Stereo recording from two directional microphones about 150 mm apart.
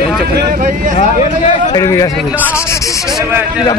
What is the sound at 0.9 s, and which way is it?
Speech, 55° left (ahead or behind).